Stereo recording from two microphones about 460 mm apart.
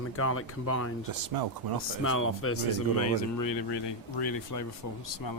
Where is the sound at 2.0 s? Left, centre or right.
Left.